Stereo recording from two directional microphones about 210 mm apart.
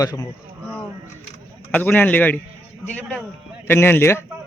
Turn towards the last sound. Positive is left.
turn(degrees=10)  # may be behind; listen again after turning